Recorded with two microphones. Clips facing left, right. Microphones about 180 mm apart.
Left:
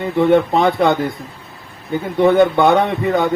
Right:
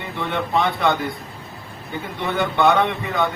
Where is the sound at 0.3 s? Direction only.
45° left (ahead or behind).